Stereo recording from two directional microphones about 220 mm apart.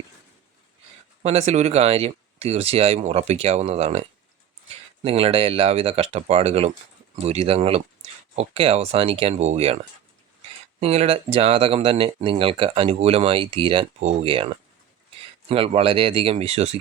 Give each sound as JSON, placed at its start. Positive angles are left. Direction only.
{"t": 1.2, "sound": "speech", "side_deg": -30}
{"t": 5.0, "sound": "speech", "side_deg": -25}
{"t": 10.8, "sound": "speech", "side_deg": -25}